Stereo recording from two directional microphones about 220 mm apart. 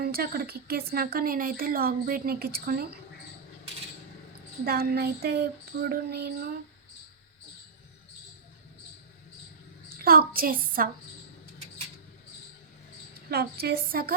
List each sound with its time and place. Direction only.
0.0 s a woman's voice: 45° right (ahead or behind)
4.6 s a woman's voice: 45° right (ahead or behind)
10.0 s a child's voice: 45° right (ahead or behind)
13.3 s a woman's voice: 45° right (ahead or behind)